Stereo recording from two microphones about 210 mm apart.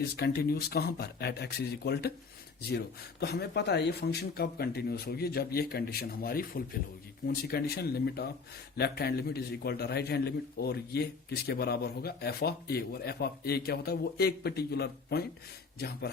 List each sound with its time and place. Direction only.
0.2 s a man's voice: 45° left (ahead or behind)